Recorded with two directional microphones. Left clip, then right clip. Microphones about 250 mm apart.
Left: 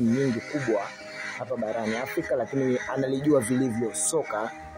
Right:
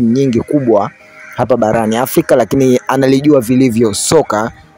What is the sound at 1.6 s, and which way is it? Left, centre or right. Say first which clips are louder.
Speech: right 16 dB; right.